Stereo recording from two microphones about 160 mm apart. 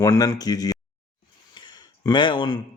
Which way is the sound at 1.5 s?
30° left (ahead or behind).